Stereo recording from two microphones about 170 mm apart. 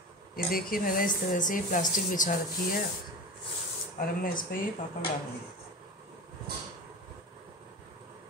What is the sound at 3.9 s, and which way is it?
Speech, 55° left (ahead or behind).